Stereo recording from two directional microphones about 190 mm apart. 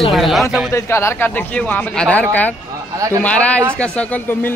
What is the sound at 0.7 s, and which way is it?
Speech, 15° left (ahead or behind).